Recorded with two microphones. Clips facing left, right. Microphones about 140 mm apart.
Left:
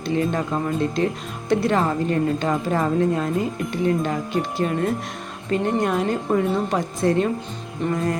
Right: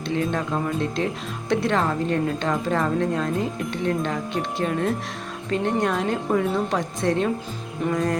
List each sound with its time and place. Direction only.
0.0 s speech: 5° left (ahead or behind)